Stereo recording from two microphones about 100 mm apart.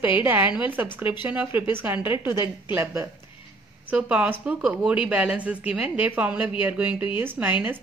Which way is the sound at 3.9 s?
10° right (ahead or behind).